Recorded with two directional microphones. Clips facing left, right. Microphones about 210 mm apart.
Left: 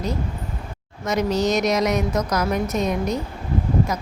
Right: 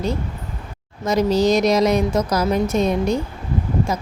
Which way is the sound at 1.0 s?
30° right (ahead or behind).